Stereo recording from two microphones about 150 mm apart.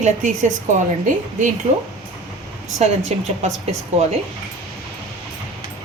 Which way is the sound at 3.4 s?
45° right (ahead or behind).